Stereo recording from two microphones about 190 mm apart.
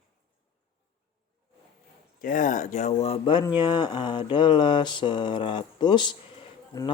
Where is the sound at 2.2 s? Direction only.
45° left (ahead or behind); by 3.5 s 25° left (ahead or behind).